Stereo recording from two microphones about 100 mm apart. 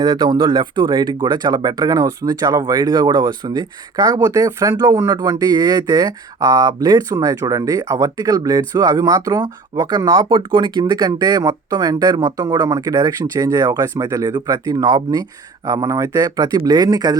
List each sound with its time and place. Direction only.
0.0 s speech: 40° right (ahead or behind)